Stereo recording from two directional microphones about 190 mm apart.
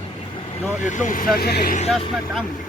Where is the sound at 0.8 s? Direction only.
40° left (ahead or behind).